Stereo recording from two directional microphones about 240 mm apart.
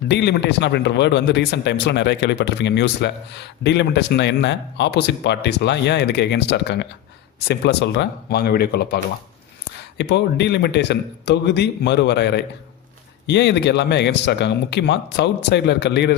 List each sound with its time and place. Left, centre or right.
0.1 s speech: left
10.0 s speech: left